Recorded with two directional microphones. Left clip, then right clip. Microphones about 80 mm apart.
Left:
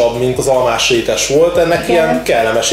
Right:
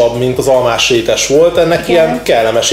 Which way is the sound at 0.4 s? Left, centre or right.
Left.